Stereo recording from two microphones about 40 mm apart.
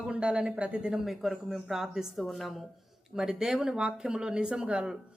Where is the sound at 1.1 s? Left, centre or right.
Centre.